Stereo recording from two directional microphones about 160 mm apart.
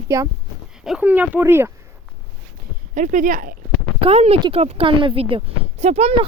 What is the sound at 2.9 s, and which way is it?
Speech, 50° right (ahead or behind).